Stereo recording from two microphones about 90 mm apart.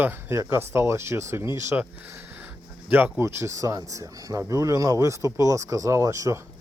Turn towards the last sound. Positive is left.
turn(degrees=-35)  # may be behind; listen again after turning